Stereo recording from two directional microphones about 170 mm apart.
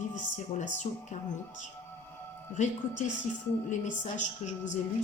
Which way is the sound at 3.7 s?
45° left (ahead or behind).